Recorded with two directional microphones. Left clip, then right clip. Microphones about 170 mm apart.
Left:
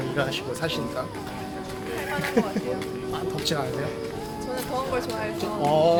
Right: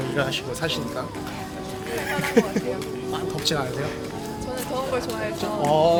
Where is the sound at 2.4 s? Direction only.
55° right (ahead or behind).